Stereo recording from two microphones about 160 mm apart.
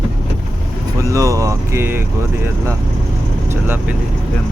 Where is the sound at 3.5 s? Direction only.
15° right (ahead or behind).